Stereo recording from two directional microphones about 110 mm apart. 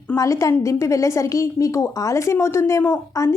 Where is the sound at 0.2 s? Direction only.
30° left (ahead or behind).